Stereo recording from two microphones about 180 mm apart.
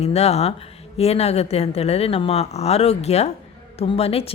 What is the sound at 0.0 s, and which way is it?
A woman's voice, 35° left (ahead or behind).